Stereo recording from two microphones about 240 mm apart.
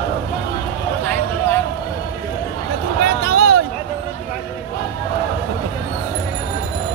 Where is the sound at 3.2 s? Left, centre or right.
Right.